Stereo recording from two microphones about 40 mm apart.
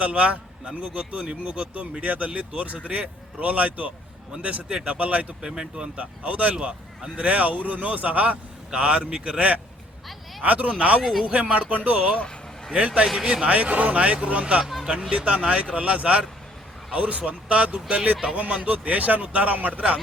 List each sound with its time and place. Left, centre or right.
0.0 s a man's voice: right
4.3 s a man's voice: right
5.4 s speech: right
6.2 s a man's voice: right
6.6 s speech: right
7.2 s a man's voice: right
10.4 s a man's voice: right
13.1 s a man's voice: centre
13.4 s a man's voice: right
14.6 s speech: centre
15.1 s a man's voice: right